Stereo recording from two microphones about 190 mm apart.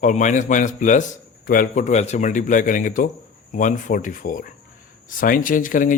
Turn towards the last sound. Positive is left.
turn(degrees=45)  # may be behind; listen again after turning